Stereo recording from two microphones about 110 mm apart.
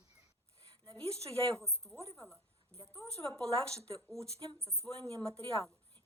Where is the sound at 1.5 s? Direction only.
5° left (ahead or behind).